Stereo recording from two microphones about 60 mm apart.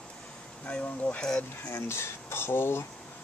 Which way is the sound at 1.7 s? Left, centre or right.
Left.